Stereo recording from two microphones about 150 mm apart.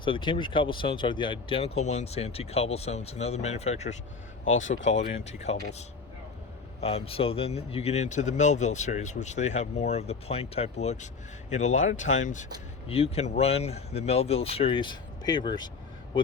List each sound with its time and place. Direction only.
0.0 s speech: 35° left (ahead or behind)
6.8 s speech: 40° left (ahead or behind); by 12.5 s 55° left (ahead or behind)
12.9 s speech: 40° left (ahead or behind)